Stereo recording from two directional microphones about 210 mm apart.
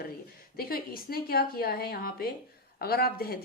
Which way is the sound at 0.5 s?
45° left (ahead or behind).